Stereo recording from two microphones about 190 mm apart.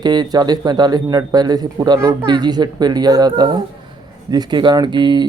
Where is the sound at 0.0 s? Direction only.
20° right (ahead or behind).